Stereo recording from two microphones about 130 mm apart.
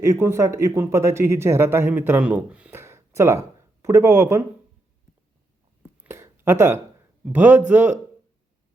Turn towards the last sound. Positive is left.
turn(degrees=-10)  # may be behind; listen again after turning